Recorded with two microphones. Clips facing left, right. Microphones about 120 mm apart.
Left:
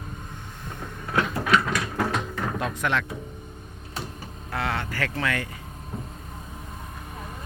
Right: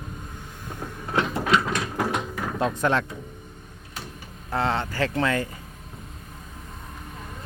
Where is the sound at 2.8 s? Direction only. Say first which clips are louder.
Right 3 dB; 35° right (ahead or behind).